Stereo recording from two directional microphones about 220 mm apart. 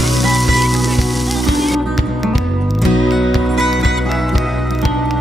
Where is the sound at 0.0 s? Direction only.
Centre (ahead or behind).